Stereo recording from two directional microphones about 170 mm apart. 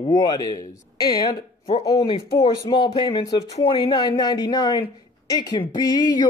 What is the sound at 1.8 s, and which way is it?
Speech, 25° left (ahead or behind).